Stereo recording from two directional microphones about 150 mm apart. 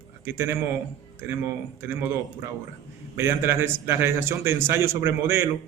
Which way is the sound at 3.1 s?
15° right (ahead or behind).